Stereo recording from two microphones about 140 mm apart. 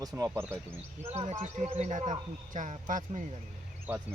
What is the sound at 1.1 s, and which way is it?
A man's voice, 50° right (ahead or behind).